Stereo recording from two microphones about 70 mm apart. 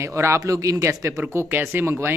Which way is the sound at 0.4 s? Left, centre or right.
Right.